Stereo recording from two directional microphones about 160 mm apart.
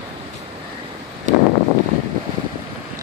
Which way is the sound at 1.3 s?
50° right (ahead or behind).